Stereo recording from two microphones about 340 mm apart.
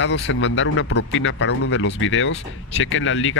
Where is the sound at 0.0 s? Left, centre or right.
Left.